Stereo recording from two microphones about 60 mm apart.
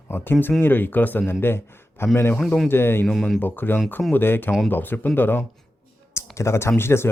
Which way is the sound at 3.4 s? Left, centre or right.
Left.